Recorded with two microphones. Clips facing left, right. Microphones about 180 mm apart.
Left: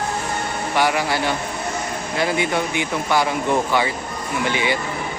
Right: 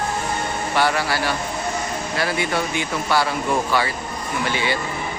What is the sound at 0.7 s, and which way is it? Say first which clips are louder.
Speech: left 1 dB; 15° left (ahead or behind).